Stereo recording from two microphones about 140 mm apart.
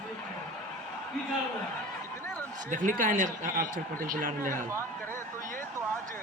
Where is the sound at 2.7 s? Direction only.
70° right (ahead or behind).